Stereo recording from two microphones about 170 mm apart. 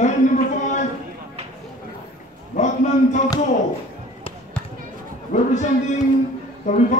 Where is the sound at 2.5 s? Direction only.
45° left (ahead or behind).